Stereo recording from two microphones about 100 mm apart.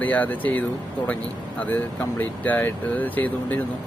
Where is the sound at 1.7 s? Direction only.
20° left (ahead or behind).